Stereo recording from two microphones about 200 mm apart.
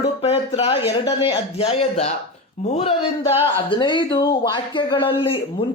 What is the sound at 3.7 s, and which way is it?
Speech, 25° left (ahead or behind).